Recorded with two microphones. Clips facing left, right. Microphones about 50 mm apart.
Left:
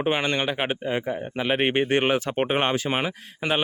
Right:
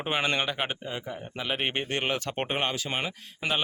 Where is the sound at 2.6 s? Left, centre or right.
Left.